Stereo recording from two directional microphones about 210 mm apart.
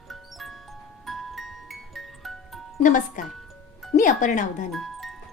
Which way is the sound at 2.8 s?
35° left (ahead or behind).